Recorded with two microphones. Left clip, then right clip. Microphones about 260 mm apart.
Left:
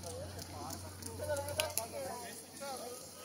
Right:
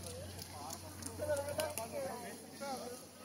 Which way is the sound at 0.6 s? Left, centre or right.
Left.